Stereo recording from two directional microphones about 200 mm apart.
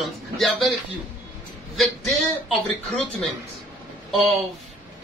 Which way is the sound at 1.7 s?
Centre (ahead or behind).